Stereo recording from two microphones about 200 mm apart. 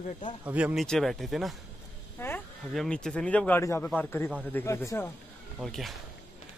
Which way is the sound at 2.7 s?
Centre (ahead or behind).